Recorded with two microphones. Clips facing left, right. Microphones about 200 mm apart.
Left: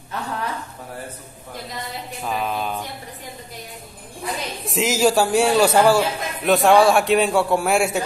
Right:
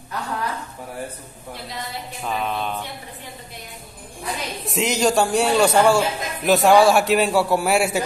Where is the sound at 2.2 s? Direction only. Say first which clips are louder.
Left 1 dB; 5° left (ahead or behind).